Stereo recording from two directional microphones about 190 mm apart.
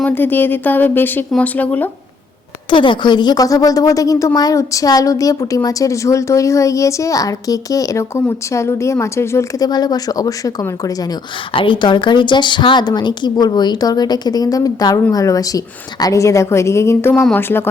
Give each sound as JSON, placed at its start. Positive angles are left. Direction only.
{"t": 0.0, "sound": "a woman's voice", "side_deg": 10}
{"t": 2.6, "sound": "a woman's voice", "side_deg": 25}